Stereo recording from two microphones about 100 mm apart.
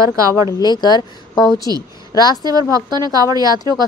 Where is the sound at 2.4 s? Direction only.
40° right (ahead or behind).